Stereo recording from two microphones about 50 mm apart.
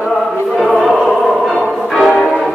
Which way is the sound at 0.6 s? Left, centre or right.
Centre.